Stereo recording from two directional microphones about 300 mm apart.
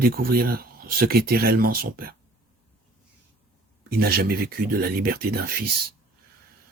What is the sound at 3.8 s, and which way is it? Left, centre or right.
Speech, right.